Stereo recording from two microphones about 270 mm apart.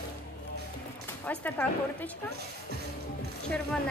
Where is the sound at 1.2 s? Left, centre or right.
Centre.